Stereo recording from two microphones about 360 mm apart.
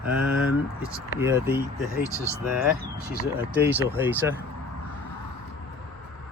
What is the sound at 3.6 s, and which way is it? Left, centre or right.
Speech, centre.